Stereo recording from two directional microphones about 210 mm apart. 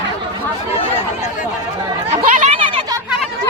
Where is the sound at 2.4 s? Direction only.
30° right (ahead or behind).